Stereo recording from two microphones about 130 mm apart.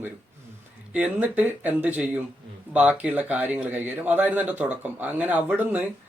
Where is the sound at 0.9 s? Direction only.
10° right (ahead or behind).